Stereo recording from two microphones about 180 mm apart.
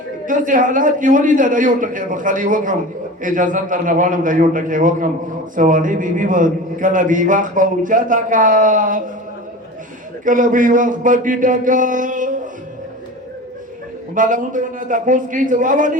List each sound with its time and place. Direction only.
0.3 s a man's voice: 45° right (ahead or behind)
10.2 s a man's voice: 45° right (ahead or behind)
14.2 s a man's voice: 45° right (ahead or behind)